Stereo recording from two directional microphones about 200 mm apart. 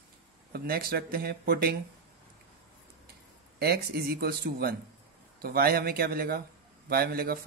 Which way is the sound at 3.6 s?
50° right (ahead or behind).